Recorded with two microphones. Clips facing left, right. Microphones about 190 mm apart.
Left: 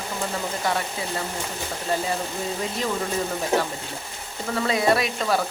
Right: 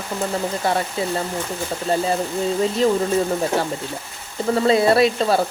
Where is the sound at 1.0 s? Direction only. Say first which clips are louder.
Right 8 dB; 30° right (ahead or behind).